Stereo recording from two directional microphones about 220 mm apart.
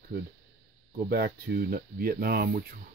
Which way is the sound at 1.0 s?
45° right (ahead or behind).